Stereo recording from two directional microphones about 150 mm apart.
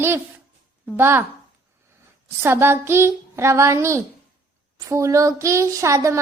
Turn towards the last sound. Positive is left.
turn(degrees=-20)  # may be behind; listen again after turning